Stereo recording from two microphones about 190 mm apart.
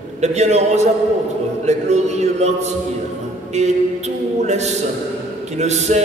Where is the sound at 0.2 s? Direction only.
35° right (ahead or behind).